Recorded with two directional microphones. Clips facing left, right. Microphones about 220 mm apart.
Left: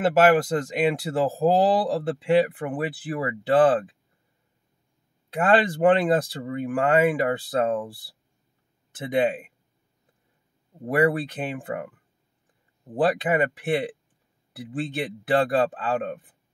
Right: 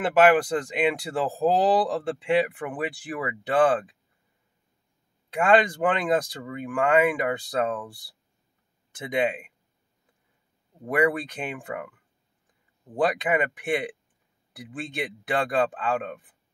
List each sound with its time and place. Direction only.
0.0 s speech: 40° left (ahead or behind)
5.3 s speech: 35° left (ahead or behind)
9.2 s speech: 35° left (ahead or behind)
10.9 s speech: 30° left (ahead or behind)
12.9 s speech: 30° left (ahead or behind)